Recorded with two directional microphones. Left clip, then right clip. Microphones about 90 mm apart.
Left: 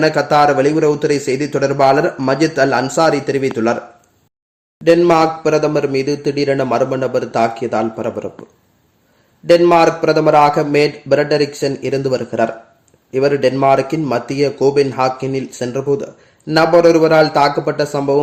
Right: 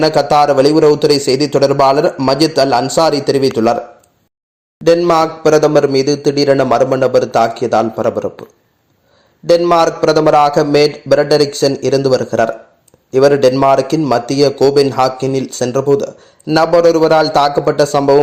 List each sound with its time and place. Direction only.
0.0 s a man's voice: 25° right (ahead or behind)
5.0 s a man's voice: 15° right (ahead or behind)
9.5 s a man's voice: 25° right (ahead or behind)